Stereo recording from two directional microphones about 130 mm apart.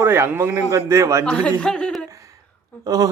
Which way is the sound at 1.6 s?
10° left (ahead or behind).